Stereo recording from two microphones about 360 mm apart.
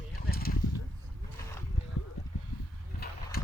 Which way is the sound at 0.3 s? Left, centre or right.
Left.